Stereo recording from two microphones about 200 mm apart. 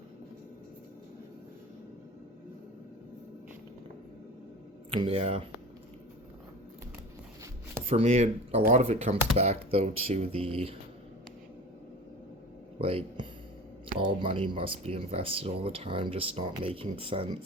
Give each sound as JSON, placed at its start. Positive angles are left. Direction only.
{"t": 4.9, "sound": "speech", "side_deg": -30}
{"t": 7.9, "sound": "speech", "side_deg": -30}
{"t": 12.8, "sound": "speech", "side_deg": -30}